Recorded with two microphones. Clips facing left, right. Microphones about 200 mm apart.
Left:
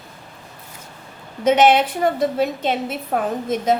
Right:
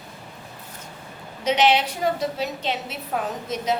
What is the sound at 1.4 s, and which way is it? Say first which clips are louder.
A woman's voice: left 6 dB; 50° left (ahead or behind).